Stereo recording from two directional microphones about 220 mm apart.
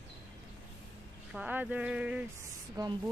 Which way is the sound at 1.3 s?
5° right (ahead or behind).